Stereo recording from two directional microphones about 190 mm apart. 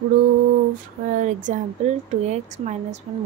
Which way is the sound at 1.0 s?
40° right (ahead or behind).